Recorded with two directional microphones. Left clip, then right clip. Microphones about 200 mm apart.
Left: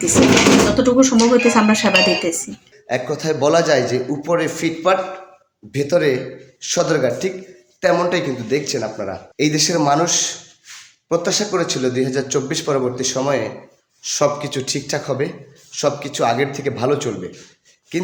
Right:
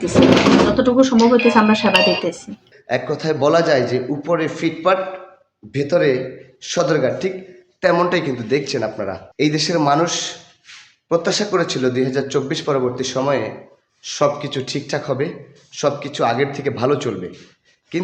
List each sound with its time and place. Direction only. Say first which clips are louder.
0.8 s a man's voice: even; centre (ahead or behind)
1.5 s a man's voice: right 1 dB; 5° left (ahead or behind)
1.9 s speech: even; 15° right (ahead or behind)
2.8 s a man's voice: even; centre (ahead or behind)